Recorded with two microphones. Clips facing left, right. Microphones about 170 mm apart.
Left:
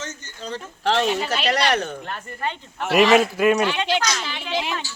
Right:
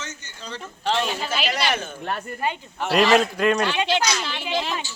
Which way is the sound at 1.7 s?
70° left (ahead or behind).